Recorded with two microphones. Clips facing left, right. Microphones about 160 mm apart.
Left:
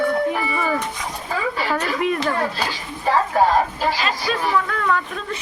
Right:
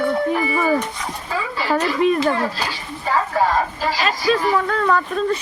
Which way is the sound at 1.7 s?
30° right (ahead or behind).